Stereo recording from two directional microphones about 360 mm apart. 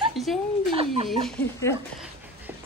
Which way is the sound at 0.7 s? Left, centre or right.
Centre.